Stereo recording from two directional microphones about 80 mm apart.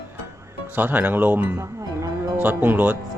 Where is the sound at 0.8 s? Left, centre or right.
Right.